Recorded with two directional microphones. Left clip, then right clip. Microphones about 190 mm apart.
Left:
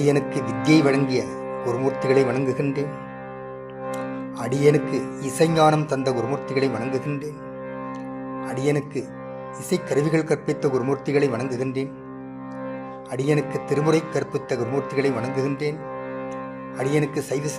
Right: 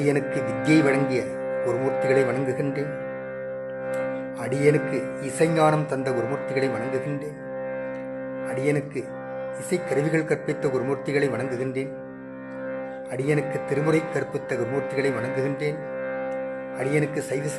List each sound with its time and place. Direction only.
0.0 s speech: 20° left (ahead or behind)
4.4 s speech: 20° left (ahead or behind)
8.4 s speech: 20° left (ahead or behind)
13.1 s speech: 20° left (ahead or behind)
16.8 s speech: 20° left (ahead or behind)